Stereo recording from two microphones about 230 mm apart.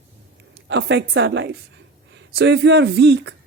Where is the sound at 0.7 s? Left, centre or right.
Right.